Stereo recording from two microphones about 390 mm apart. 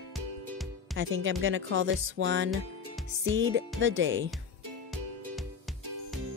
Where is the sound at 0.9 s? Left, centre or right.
Right.